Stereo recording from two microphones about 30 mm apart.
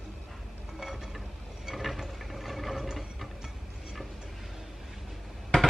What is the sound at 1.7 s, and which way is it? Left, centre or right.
Ratchet, centre.